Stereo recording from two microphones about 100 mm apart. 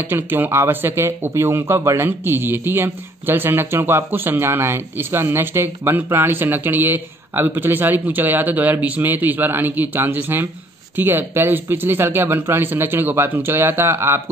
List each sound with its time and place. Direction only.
0.0 s speech: 20° right (ahead or behind)